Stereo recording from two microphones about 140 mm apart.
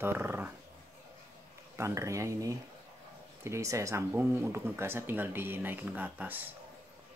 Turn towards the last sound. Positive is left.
turn(degrees=-10)  # may be behind; listen again after turning